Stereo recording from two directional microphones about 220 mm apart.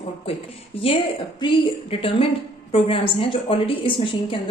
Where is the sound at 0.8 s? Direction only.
25° left (ahead or behind).